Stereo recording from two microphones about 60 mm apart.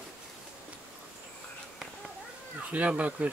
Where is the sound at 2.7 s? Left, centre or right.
Right.